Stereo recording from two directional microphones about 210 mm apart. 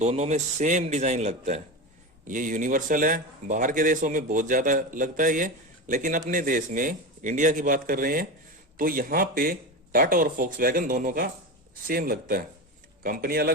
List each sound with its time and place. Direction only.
0.0 s speech: 30° right (ahead or behind)